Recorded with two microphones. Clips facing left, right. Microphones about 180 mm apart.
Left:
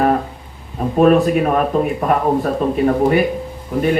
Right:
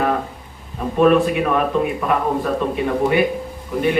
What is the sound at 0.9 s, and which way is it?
Speech, 40° left (ahead or behind).